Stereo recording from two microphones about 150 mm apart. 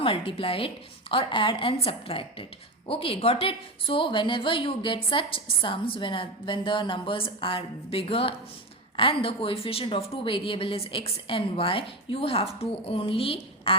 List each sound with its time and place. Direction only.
0.0 s a woman's voice: 35° left (ahead or behind)